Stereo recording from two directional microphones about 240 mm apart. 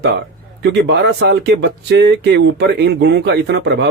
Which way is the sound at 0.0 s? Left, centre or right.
Right.